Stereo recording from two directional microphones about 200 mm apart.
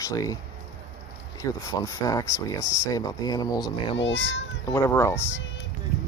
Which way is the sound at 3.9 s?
65° left (ahead or behind).